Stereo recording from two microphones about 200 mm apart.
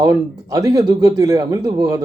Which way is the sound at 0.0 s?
20° right (ahead or behind).